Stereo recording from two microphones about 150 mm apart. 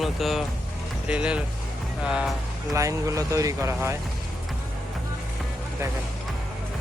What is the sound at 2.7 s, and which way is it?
Speech, 20° right (ahead or behind).